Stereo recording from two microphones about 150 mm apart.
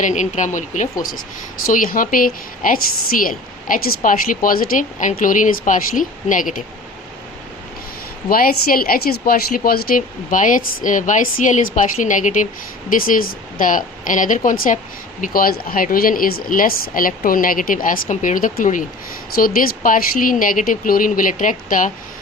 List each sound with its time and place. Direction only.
0.0 s speech: 55° left (ahead or behind)
1.6 s a woman's voice: 65° left (ahead or behind)
8.3 s a woman's voice: 75° left (ahead or behind); by 12.5 s 55° left (ahead or behind)
12.9 s a woman's voice: 70° left (ahead or behind)
19.4 s speech: 70° left (ahead or behind)